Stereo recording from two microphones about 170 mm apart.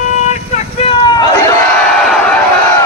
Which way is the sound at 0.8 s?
25° left (ahead or behind).